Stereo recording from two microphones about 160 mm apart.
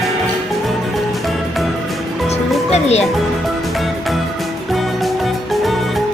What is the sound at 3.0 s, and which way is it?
Music, centre (ahead or behind).